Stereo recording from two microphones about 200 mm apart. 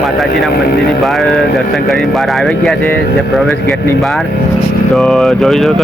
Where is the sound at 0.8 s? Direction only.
Centre (ahead or behind).